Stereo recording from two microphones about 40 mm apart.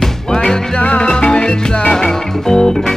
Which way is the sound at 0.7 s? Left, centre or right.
Left.